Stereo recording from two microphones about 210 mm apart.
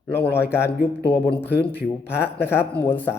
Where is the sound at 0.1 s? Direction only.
10° left (ahead or behind).